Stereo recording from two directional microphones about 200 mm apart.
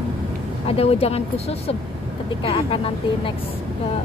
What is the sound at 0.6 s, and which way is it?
Speech, 30° left (ahead or behind).